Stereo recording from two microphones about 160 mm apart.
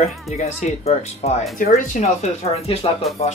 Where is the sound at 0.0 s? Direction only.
40° left (ahead or behind).